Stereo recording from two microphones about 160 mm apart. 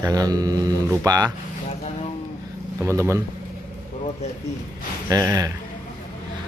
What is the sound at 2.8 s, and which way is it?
Speech, 15° right (ahead or behind).